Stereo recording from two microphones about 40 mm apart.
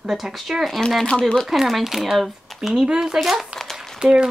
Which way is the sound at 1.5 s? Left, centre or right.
Centre.